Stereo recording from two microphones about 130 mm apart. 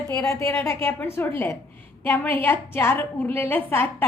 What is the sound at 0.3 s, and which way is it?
A woman's voice, 20° left (ahead or behind).